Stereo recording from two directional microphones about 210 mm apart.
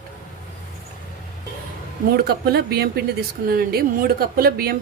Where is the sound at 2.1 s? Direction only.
50° right (ahead or behind).